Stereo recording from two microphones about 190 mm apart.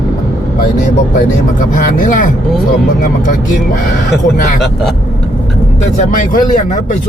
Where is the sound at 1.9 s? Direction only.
45° left (ahead or behind).